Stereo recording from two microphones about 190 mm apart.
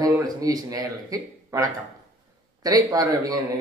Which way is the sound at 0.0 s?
20° right (ahead or behind).